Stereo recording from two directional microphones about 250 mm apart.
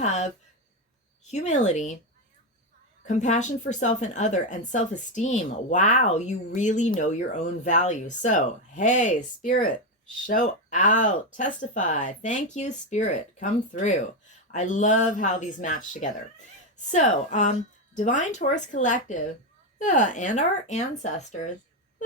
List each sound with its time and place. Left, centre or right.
0.0 s a woman's voice: left
1.3 s a woman's voice: left
3.1 s a woman's voice: left